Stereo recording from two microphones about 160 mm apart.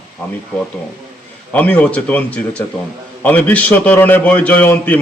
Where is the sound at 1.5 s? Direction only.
10° left (ahead or behind).